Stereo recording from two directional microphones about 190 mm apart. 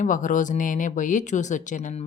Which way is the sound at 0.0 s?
45° left (ahead or behind).